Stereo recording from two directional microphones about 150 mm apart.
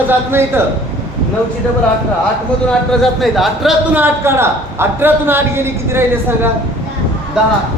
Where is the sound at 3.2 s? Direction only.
Centre (ahead or behind).